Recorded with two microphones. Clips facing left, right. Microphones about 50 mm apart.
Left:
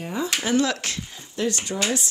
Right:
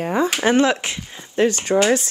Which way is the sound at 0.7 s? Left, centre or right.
Right.